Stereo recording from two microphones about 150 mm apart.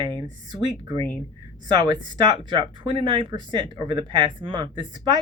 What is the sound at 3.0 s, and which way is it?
Speech, 35° right (ahead or behind).